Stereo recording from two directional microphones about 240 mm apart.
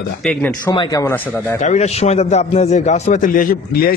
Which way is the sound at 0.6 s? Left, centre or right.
Centre.